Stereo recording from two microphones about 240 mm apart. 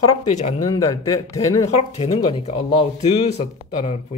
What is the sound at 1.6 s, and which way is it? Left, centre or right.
Speech, left.